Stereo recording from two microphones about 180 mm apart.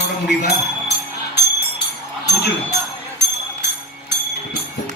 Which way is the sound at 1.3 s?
70° left (ahead or behind).